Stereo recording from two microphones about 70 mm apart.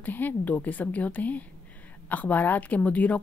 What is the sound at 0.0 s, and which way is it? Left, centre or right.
Speech, left.